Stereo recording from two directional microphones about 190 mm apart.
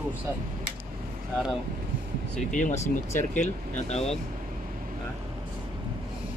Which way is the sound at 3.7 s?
35° left (ahead or behind).